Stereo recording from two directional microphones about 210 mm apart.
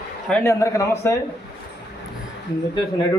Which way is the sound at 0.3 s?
10° left (ahead or behind).